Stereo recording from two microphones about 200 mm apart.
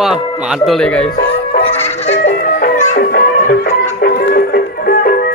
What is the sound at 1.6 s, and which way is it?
Music, 30° left (ahead or behind).